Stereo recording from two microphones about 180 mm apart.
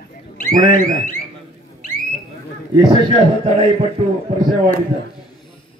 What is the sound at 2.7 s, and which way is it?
Speech, 25° right (ahead or behind).